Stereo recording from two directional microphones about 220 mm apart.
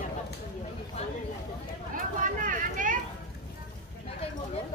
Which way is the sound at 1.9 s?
35° right (ahead or behind).